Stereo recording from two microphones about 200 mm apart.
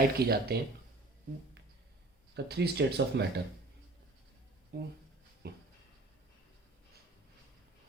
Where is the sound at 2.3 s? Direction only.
55° right (ahead or behind).